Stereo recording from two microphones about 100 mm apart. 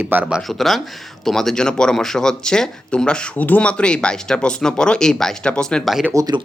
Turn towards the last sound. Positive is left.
turn(degrees=-35)  # may be behind; listen again after turning